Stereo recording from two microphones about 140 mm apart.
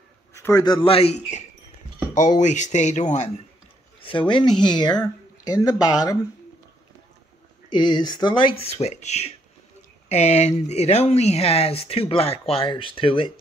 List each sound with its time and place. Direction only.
0.3 s a man's voice: 25° left (ahead or behind)
0.8 s speech: 45° left (ahead or behind)
2.1 s speech: 60° left (ahead or behind)
4.0 s speech: 35° left (ahead or behind)
7.7 s speech: 30° left (ahead or behind)